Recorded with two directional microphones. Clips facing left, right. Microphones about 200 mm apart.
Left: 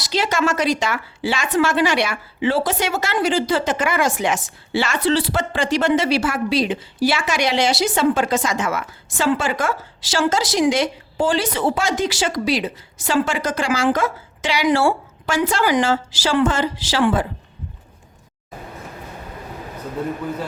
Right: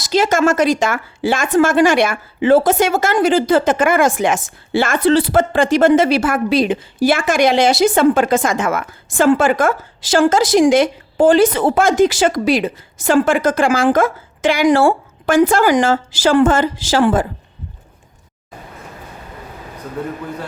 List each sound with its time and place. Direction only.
0.0 s speech: 50° right (ahead or behind)